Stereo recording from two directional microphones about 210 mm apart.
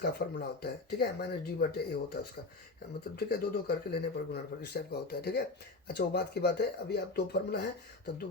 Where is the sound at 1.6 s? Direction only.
50° left (ahead or behind).